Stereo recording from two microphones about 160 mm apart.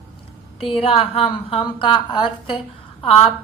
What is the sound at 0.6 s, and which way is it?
A woman's voice, 35° left (ahead or behind).